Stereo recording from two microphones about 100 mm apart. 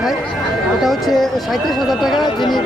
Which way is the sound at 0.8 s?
Centre (ahead or behind).